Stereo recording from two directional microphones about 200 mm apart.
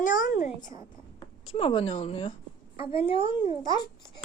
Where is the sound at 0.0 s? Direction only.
40° left (ahead or behind).